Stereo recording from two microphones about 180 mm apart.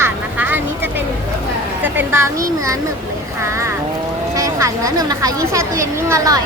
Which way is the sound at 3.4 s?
15° right (ahead or behind).